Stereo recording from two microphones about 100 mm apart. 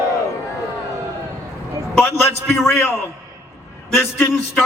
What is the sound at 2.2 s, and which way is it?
Speech, 20° left (ahead or behind).